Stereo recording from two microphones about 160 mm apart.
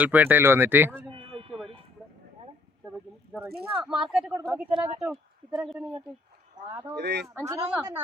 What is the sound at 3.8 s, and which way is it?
Speech, 5° right (ahead or behind).